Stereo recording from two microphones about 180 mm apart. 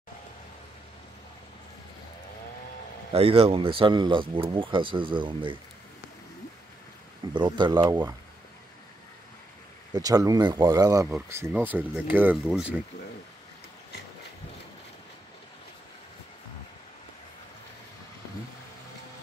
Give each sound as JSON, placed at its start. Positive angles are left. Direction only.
{"t": 3.1, "sound": "speech", "side_deg": -30}
{"t": 7.3, "sound": "speech", "side_deg": -25}
{"t": 9.9, "sound": "speech", "side_deg": -20}